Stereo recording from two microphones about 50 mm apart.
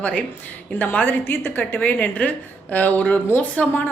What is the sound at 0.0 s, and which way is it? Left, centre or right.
Speech, left.